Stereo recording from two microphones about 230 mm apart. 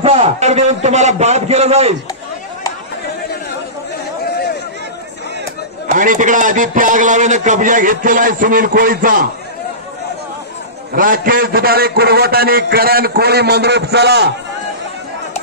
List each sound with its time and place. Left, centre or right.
0.0 s a man's voice: right
5.9 s a man's voice: right
10.9 s a man's voice: right